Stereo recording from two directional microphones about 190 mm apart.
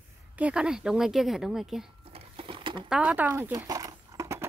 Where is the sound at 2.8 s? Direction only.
5° right (ahead or behind).